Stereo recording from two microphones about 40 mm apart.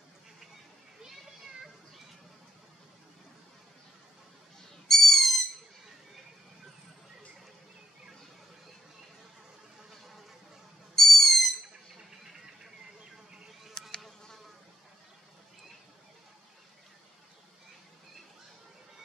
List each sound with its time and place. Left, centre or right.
1.0 s children playing: centre
4.8 s owl: centre
9.8 s a sound: centre
11.0 s owl: centre
13.8 s insect: centre